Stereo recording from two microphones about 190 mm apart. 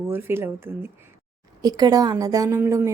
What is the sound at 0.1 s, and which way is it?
A woman's voice, 10° right (ahead or behind).